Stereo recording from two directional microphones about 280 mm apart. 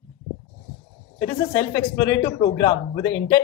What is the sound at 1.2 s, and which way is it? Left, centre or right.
A man's voice, centre.